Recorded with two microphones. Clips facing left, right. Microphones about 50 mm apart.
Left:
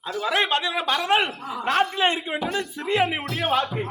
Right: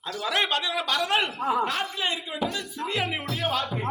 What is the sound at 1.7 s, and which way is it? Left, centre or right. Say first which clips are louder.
A man's voice: left 7 dB; left.